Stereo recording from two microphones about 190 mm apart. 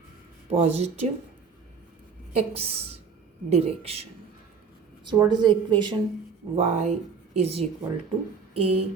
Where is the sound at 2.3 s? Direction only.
30° right (ahead or behind).